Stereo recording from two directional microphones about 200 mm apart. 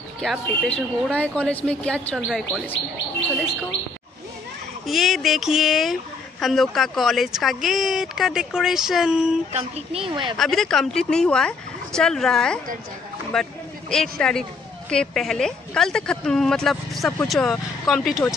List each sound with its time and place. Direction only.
0.2 s a woman's voice: centre (ahead or behind)
4.8 s a woman's voice: centre (ahead or behind)
9.5 s speech: 30° right (ahead or behind)
10.3 s a woman's voice: centre (ahead or behind)
13.3 s a sound: 5° left (ahead or behind)
14.9 s a woman's voice: 5° left (ahead or behind)